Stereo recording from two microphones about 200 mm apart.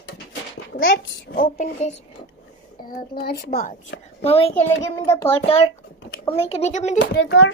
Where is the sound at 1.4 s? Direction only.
35° left (ahead or behind).